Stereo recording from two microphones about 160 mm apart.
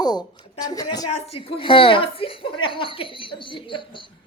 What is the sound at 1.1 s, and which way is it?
A woman's voice, 40° left (ahead or behind).